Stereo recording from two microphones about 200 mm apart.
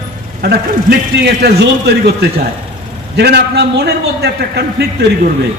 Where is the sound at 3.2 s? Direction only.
55° right (ahead or behind).